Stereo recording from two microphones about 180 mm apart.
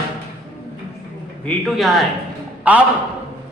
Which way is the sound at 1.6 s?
Centre (ahead or behind).